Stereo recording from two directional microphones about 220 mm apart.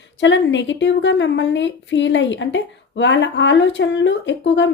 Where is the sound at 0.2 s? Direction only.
55° left (ahead or behind).